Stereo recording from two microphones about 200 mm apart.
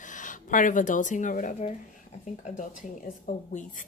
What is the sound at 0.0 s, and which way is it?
Speech, 40° left (ahead or behind).